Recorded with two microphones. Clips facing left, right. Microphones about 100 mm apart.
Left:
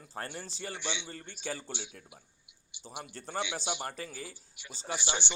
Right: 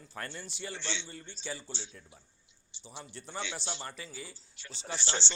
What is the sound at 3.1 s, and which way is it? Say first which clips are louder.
Speech: left 4 dB; 45° left (ahead or behind).